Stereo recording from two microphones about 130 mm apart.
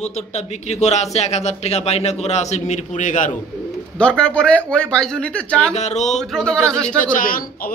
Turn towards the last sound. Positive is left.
turn(degrees=90)